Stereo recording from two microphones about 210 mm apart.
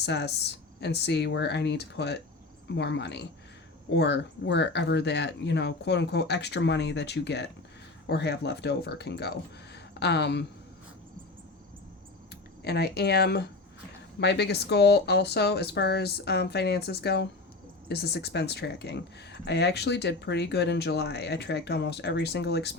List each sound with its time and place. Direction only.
0.0 s speech: 50° left (ahead or behind)
12.6 s speech: 50° left (ahead or behind)